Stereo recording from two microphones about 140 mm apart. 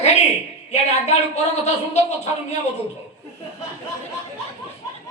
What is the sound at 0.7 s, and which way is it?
A man's voice, 55° left (ahead or behind).